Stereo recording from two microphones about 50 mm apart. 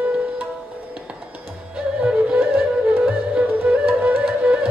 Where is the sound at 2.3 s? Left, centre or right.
Right.